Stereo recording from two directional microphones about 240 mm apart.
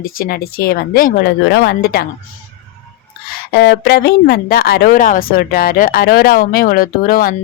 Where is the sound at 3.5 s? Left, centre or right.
Left.